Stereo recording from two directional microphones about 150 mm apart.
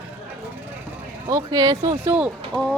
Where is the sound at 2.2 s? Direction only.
5° right (ahead or behind).